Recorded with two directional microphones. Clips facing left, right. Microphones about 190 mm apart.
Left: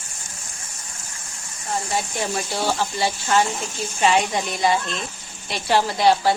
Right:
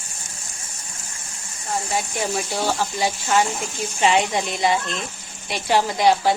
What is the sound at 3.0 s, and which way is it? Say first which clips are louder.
A woman's voice: even; 10° right (ahead or behind).